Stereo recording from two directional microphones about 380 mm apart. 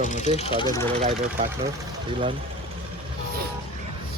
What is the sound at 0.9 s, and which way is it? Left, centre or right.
Speech, centre.